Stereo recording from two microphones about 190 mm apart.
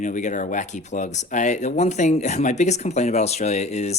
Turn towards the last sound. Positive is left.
turn(degrees=35)  # may be behind; listen again after turning